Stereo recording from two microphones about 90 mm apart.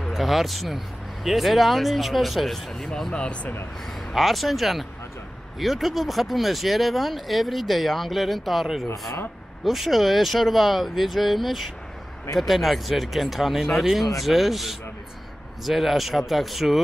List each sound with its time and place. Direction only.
0.0 s speech: centre (ahead or behind)
4.1 s speech: centre (ahead or behind)